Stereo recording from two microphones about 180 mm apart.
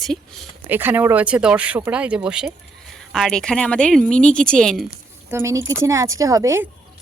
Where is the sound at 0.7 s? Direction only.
10° right (ahead or behind).